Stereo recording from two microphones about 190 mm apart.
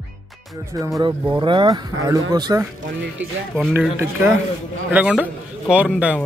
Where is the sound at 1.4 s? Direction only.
25° right (ahead or behind).